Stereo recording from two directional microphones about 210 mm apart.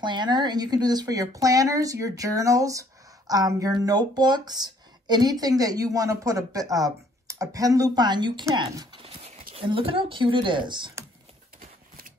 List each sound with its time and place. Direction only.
0.0 s a woman's voice: 20° right (ahead or behind)